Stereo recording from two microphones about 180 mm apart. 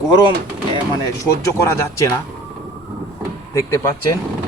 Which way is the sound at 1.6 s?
15° left (ahead or behind).